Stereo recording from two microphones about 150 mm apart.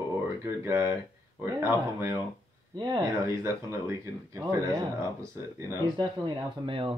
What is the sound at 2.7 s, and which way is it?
Speech, 30° right (ahead or behind).